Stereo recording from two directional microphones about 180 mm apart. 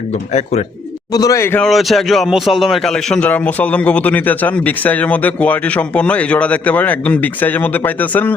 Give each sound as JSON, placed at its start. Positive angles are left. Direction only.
{"t": 1.1, "sound": "a man's voice", "side_deg": 20}
{"t": 1.6, "sound": "a man's voice", "side_deg": 0}